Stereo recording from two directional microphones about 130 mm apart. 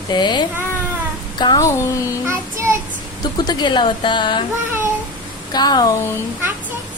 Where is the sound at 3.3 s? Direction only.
30° left (ahead or behind).